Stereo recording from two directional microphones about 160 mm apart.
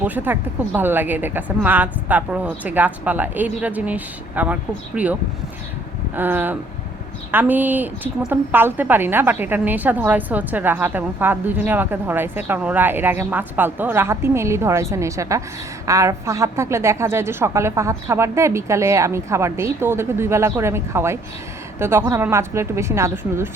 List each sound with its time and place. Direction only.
0.0 s a woman's voice: 10° right (ahead or behind)
6.1 s a woman's voice: 10° right (ahead or behind)